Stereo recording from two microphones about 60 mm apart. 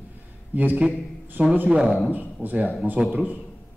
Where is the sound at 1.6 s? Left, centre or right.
Centre.